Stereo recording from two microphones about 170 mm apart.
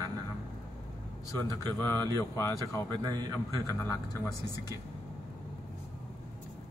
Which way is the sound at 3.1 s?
20° right (ahead or behind).